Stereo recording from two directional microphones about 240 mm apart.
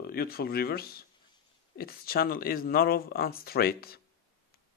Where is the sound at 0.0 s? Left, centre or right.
Left.